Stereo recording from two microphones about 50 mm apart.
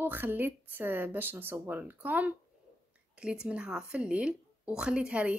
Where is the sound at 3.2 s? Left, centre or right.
Centre.